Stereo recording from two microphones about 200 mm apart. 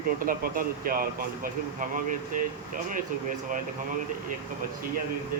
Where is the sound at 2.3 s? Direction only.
40° right (ahead or behind).